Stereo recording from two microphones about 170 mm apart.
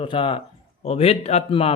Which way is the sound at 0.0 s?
30° left (ahead or behind).